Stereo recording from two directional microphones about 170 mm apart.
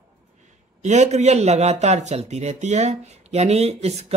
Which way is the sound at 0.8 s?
40° right (ahead or behind).